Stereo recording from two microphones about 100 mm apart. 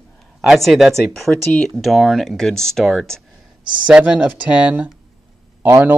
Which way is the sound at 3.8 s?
10° right (ahead or behind).